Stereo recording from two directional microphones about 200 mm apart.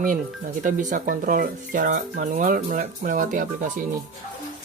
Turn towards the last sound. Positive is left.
turn(degrees=-40)  # may be behind; listen again after turning